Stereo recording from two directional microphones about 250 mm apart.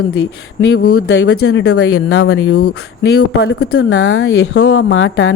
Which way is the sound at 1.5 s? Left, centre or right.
Left.